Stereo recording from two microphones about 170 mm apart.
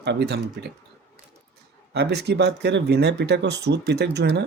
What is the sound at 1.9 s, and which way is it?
Speech, 75° right (ahead or behind).